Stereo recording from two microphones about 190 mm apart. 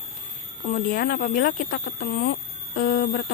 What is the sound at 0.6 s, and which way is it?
Speech, 45° left (ahead or behind).